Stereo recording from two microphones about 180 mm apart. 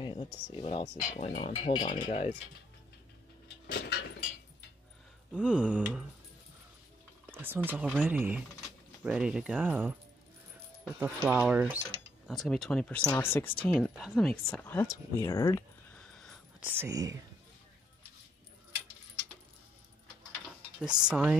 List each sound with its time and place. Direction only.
0.0 s speech: 25° left (ahead or behind)
3.6 s a sound: 65° left (ahead or behind)
5.3 s speech: 5° right (ahead or behind)
7.2 s speech: 10° right (ahead or behind)
11.0 s speech: 10° right (ahead or behind)
14.3 s speech: 10° left (ahead or behind)
15.2 s a sound: 15° left (ahead or behind)
16.5 s speech: 10° right (ahead or behind)
21.0 s speech: 5° right (ahead or behind)